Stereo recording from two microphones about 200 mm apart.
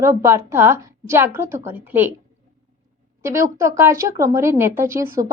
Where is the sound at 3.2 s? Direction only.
15° right (ahead or behind).